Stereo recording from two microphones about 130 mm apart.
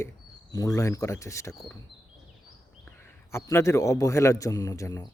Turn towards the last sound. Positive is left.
turn(degrees=25)  # may be behind; listen again after turning